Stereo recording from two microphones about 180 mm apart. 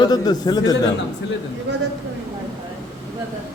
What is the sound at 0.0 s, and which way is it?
Speech, 20° left (ahead or behind).